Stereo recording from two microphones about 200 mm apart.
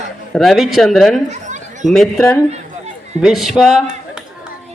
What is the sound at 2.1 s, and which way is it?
Speech, 15° left (ahead or behind).